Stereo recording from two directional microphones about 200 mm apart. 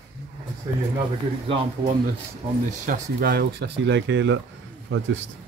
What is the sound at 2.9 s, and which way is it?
Speech, 50° right (ahead or behind).